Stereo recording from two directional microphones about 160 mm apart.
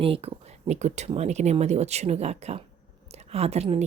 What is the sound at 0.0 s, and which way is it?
A woman's voice, 35° right (ahead or behind).